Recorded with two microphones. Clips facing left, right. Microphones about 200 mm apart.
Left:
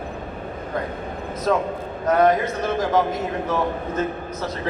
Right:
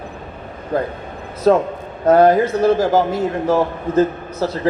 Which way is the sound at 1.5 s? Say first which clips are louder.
Right 8 dB; 35° right (ahead or behind).